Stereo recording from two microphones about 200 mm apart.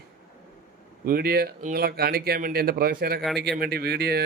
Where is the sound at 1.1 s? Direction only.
50° right (ahead or behind).